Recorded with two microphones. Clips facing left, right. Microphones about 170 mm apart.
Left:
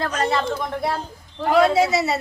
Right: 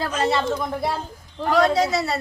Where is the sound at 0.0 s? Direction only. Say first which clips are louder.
Even; 5° right (ahead or behind).